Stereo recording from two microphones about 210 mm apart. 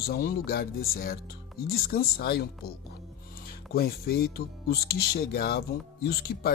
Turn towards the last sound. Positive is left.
turn(degrees=45)  # may be behind; listen again after turning